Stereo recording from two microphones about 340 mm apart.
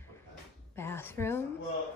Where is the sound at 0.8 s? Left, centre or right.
Centre.